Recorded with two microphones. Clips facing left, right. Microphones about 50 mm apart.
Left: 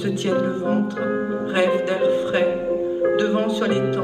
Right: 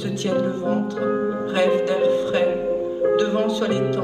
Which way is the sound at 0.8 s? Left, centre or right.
Centre.